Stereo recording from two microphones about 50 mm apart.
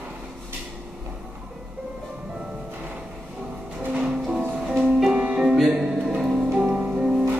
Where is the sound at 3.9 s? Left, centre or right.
Centre.